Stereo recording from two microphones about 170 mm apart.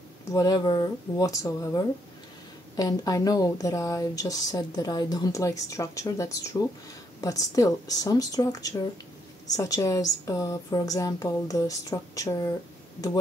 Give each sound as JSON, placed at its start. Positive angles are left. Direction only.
{"t": 0.3, "sound": "speech", "side_deg": 20}